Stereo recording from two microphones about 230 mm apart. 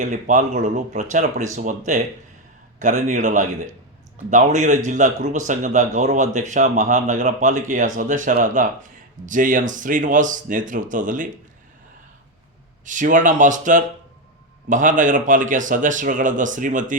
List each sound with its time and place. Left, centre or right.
0.0 s speech: right
12.8 s speech: right